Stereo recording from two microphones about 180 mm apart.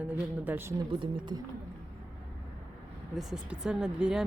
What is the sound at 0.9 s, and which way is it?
Speech, 25° right (ahead or behind).